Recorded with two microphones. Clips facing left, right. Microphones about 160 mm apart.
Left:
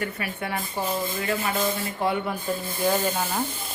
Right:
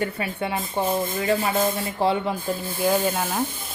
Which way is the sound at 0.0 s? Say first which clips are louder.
Right 4 dB; 30° right (ahead or behind).